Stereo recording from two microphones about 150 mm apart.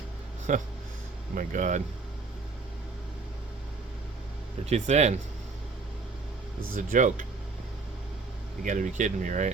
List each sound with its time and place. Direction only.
0.5 s speech: 60° right (ahead or behind)
4.6 s speech: 45° right (ahead or behind)
6.7 s speech: 60° right (ahead or behind)
8.6 s speech: 55° right (ahead or behind)